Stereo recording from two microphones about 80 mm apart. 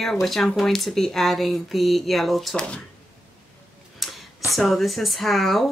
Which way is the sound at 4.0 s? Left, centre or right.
Centre.